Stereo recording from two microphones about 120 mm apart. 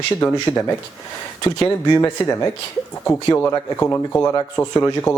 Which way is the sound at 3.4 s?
20° left (ahead or behind).